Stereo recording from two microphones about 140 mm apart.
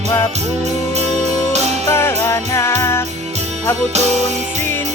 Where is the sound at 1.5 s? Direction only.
50° right (ahead or behind).